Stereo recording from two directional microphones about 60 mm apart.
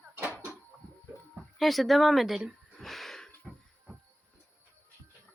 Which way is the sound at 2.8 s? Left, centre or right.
Centre.